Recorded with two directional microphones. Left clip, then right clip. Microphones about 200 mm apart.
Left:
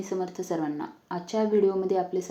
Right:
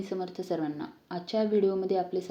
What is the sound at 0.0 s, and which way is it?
A woman's voice, 15° right (ahead or behind).